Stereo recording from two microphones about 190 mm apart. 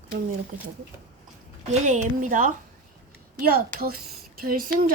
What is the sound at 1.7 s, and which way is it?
A woman's voice, 40° right (ahead or behind).